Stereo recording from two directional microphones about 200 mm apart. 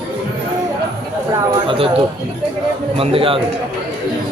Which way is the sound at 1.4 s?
20° right (ahead or behind).